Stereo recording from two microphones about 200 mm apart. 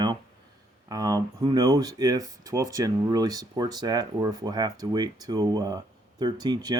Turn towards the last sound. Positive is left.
turn(degrees=-20)  # may be behind; listen again after turning